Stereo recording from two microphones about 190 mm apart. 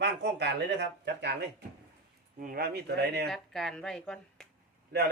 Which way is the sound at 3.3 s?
Centre (ahead or behind).